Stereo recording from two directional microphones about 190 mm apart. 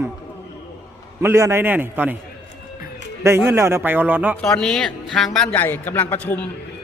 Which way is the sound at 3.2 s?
10° right (ahead or behind).